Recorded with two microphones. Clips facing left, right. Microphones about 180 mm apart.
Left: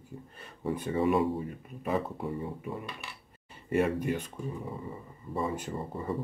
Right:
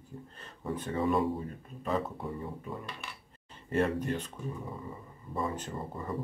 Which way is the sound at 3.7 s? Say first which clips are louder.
Left 2 dB; 10° left (ahead or behind).